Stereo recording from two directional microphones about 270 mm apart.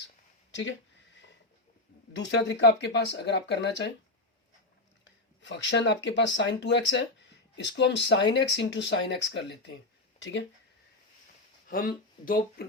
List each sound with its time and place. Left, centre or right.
0.5 s a sound: left
2.1 s speech: left
5.4 s speech: left
11.7 s speech: left